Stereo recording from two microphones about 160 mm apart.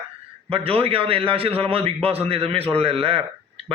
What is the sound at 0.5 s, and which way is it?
A man's voice, 35° right (ahead or behind).